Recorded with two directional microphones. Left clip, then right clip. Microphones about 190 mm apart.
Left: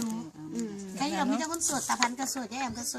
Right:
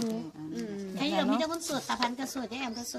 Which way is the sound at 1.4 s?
10° left (ahead or behind).